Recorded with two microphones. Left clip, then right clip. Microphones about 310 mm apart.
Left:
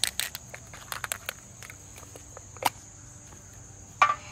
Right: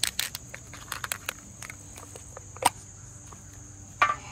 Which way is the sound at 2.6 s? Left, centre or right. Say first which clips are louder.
Right 3 dB; right.